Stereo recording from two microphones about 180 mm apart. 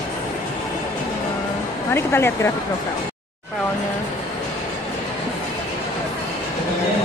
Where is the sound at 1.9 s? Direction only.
15° left (ahead or behind).